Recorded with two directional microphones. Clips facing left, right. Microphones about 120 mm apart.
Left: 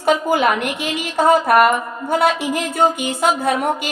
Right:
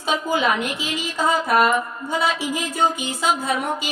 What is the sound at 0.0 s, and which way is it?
A woman's voice, 60° left (ahead or behind).